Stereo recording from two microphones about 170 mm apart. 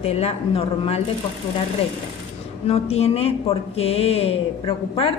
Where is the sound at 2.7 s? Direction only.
35° left (ahead or behind).